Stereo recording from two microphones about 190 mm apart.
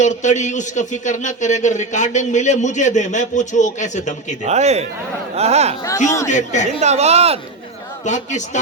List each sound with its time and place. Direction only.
0.0 s a man's voice: 40° left (ahead or behind)
4.4 s speech: 35° right (ahead or behind)
6.2 s a man's voice: 40° left (ahead or behind)
6.7 s speech: 35° right (ahead or behind)
8.0 s a man's voice: 40° left (ahead or behind)